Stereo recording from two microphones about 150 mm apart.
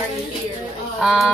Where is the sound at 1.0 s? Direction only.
Centre (ahead or behind).